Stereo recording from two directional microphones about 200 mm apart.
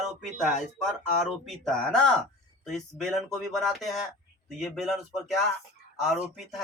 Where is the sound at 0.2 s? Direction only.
Centre (ahead or behind).